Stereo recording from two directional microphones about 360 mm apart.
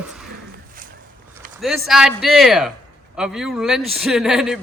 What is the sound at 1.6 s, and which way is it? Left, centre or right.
A man's voice, centre.